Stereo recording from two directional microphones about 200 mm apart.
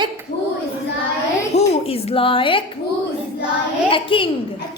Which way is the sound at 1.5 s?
30° left (ahead or behind).